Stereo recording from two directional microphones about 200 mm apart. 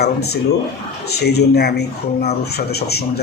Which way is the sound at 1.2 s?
55° left (ahead or behind).